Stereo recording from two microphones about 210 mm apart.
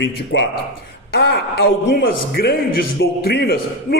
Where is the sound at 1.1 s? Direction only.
50° left (ahead or behind).